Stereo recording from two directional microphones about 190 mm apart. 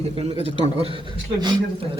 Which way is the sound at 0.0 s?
35° right (ahead or behind).